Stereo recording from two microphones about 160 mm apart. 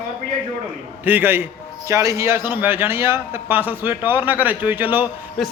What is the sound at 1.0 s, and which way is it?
A man's voice, 10° right (ahead or behind).